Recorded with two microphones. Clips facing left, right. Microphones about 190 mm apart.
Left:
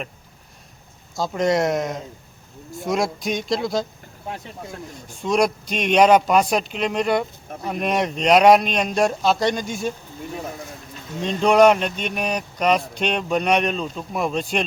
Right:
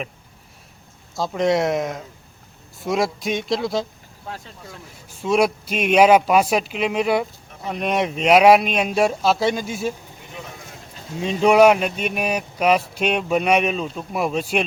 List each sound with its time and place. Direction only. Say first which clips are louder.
1.1 s speech: right 1 dB; centre (ahead or behind)
5.0 s speech: right 1 dB; 5° right (ahead or behind)
11.2 s speech: right 1 dB; 5° right (ahead or behind)